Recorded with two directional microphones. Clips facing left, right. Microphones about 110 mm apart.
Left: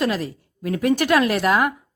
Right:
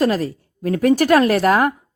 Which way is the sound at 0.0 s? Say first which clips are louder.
Right 5 dB; 40° right (ahead or behind).